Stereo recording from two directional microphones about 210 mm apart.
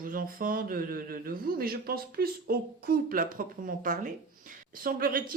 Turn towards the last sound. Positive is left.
turn(degrees=-40)  # may be behind; listen again after turning